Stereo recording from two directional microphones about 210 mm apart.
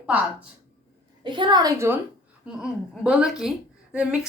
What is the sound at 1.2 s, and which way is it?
Speech, 20° right (ahead or behind).